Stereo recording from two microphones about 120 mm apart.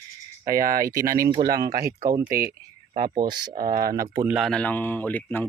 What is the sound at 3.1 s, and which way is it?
Speech, 40° right (ahead or behind).